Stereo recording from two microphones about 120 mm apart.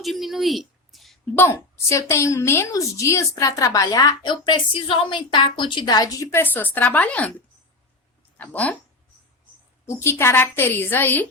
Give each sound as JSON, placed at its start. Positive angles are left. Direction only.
{"t": 0.0, "sound": "a sound", "side_deg": 0}
{"t": 1.4, "sound": "a woman's voice", "side_deg": 20}
{"t": 4.2, "sound": "a woman's voice", "side_deg": 40}
{"t": 6.3, "sound": "speech", "side_deg": 15}
{"t": 8.4, "sound": "speech", "side_deg": 15}
{"t": 9.8, "sound": "a woman's voice", "side_deg": 20}